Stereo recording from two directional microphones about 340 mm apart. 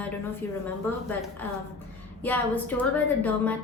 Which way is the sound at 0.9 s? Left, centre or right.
Centre.